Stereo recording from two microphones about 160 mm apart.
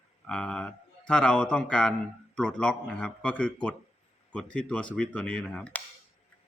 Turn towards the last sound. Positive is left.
turn(degrees=10)  # may be behind; listen again after turning